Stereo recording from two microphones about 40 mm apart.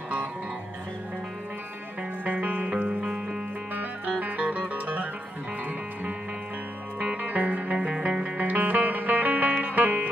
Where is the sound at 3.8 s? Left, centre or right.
Right.